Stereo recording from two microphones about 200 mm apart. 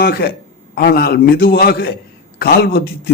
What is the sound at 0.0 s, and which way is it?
A man's voice, 50° left (ahead or behind).